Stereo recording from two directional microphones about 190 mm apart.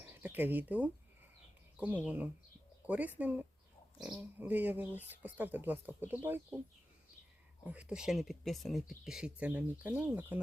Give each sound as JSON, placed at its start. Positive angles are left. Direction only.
{"t": 0.1, "sound": "speech", "side_deg": -10}
{"t": 7.6, "sound": "speech", "side_deg": -5}